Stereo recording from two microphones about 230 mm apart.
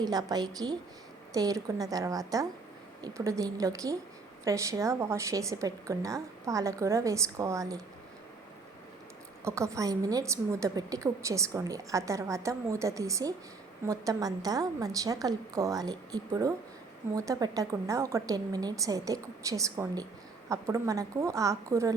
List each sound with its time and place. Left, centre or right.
0.0 s a woman's voice: centre
9.4 s a woman's voice: centre